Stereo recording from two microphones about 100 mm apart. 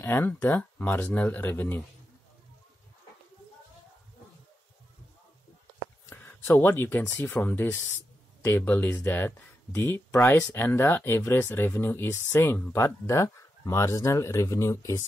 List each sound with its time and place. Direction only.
0.0 s speech: 20° left (ahead or behind)
6.0 s a sound: 25° left (ahead or behind)
6.6 s speech: 20° left (ahead or behind)